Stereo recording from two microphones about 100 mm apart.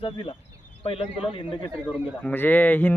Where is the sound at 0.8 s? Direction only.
65° left (ahead or behind).